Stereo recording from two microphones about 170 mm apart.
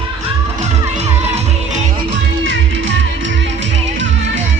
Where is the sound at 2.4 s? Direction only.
90° right.